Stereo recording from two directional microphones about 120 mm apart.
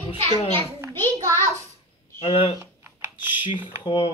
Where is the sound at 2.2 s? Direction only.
55° left (ahead or behind).